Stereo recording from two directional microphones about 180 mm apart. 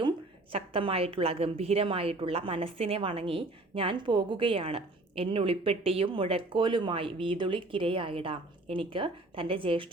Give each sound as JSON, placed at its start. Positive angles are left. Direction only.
{"t": 0.5, "sound": "a woman's voice", "side_deg": -30}